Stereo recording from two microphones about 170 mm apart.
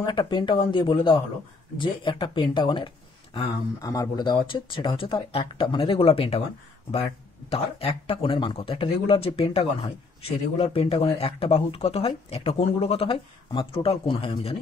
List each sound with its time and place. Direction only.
0.0 s speech: 30° left (ahead or behind)